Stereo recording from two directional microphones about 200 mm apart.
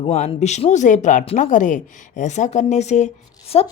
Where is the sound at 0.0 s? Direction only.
30° left (ahead or behind).